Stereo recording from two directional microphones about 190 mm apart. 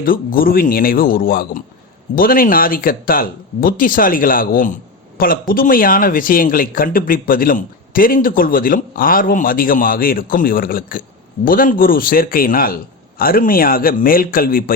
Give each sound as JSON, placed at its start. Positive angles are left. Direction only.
{"t": 0.0, "sound": "speech", "side_deg": 50}